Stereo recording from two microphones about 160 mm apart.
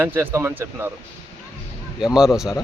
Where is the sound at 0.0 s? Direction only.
15° right (ahead or behind).